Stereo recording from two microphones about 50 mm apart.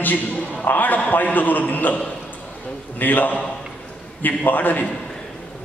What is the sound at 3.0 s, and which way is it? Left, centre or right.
A man's voice, left.